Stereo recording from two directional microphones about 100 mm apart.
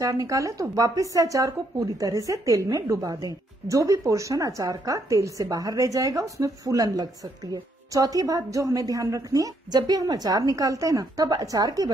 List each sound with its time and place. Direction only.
0.0 s a woman's voice: 35° right (ahead or behind)